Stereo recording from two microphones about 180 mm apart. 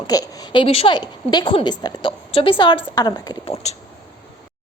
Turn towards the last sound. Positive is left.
turn(degrees=40)  # may be behind; listen again after turning